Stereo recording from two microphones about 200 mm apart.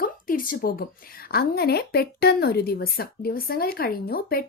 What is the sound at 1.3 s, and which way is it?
Speech, 50° left (ahead or behind).